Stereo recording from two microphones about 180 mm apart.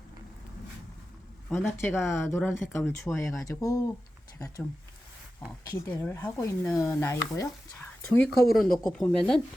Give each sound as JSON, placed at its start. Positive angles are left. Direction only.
{"t": 1.5, "sound": "speech", "side_deg": 15}
{"t": 5.7, "sound": "speech", "side_deg": 15}
{"t": 8.4, "sound": "speech", "side_deg": 55}
{"t": 8.9, "sound": "speech", "side_deg": 5}